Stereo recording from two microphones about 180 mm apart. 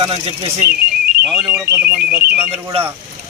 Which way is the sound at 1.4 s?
5° right (ahead or behind).